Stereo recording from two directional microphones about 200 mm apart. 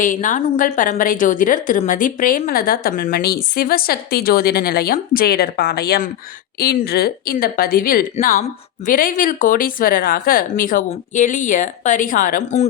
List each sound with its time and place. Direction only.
0.0 s a woman's voice: 40° left (ahead or behind)